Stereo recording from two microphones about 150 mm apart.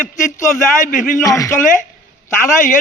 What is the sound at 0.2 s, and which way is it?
Speech, 60° left (ahead or behind).